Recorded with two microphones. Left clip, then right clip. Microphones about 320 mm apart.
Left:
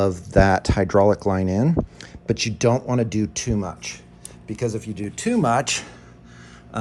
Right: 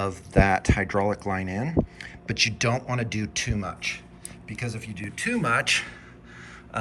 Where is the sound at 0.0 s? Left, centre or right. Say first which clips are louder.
Left 5 dB; left.